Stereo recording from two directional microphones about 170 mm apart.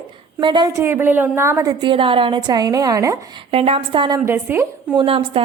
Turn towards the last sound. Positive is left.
turn(degrees=-35)  # may be behind; listen again after turning